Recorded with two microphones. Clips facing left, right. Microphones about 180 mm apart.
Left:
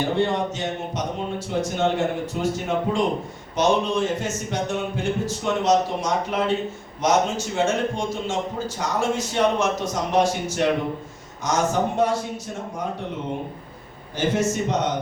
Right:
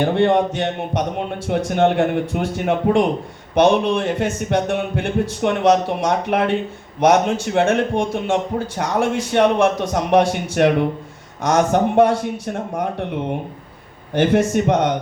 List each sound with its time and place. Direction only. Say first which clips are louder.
0.0 s a man's voice: right 6 dB; 60° right (ahead or behind)
14.1 s a man's voice: right 6 dB; 60° right (ahead or behind)